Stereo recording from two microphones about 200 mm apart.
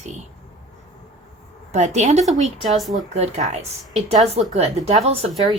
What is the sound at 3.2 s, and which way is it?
A woman's voice, 35° right (ahead or behind).